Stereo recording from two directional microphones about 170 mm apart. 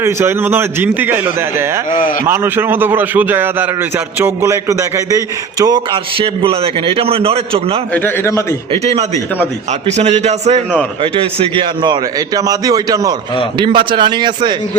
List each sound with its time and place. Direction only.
0.0 s a man's voice: 15° right (ahead or behind)
1.9 s speech: 50° left (ahead or behind)
2.2 s a man's voice: 15° right (ahead or behind); by 7.8 s 35° right (ahead or behind)
7.9 s a man's voice: 15° left (ahead or behind)
8.7 s a man's voice: 40° right (ahead or behind)